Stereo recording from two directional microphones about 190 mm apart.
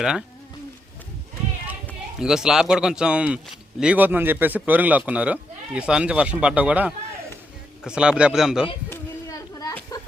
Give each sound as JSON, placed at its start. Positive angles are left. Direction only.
{"t": 0.0, "sound": "a man's voice", "side_deg": -5}
{"t": 2.1, "sound": "a man's voice", "side_deg": -5}
{"t": 8.9, "sound": "a sound", "side_deg": 15}
{"t": 9.9, "sound": "chicken", "side_deg": 20}